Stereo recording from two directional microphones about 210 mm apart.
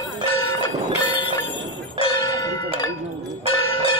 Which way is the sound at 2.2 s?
20° left (ahead or behind).